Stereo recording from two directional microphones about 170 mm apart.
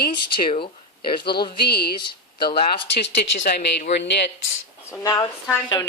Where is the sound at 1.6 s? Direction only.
70° left (ahead or behind).